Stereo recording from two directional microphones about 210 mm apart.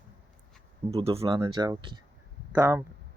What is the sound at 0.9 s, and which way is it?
Speech, 30° right (ahead or behind).